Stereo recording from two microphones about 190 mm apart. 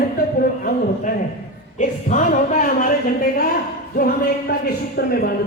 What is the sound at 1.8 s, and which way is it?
Speech, 40° left (ahead or behind).